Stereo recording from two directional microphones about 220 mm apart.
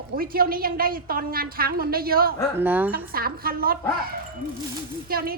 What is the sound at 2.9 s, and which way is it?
Speech, 45° right (ahead or behind).